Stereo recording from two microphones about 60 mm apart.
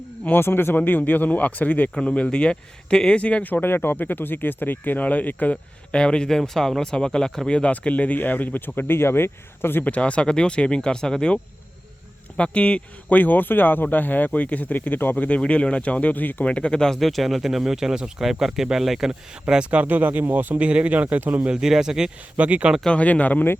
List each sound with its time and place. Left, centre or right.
0.3 s speech: left
2.0 s speech: centre
5.9 s speech: centre
7.5 s speech: left
9.8 s speech: left
12.4 s speech: centre
15.1 s speech: left
16.5 s speech: centre
19.8 s speech: right
21.5 s speech: centre
22.4 s speech: right
22.9 s speech: left